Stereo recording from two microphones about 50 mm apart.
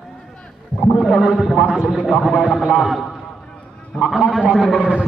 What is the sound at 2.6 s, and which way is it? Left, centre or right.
Speech, centre.